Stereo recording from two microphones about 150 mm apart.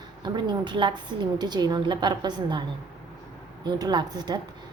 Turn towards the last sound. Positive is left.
turn(degrees=-30)  # may be behind; listen again after turning